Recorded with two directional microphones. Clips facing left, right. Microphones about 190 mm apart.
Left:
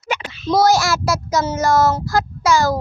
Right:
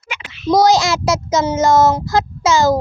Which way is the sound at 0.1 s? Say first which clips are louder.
Left 8 dB; 40° left (ahead or behind).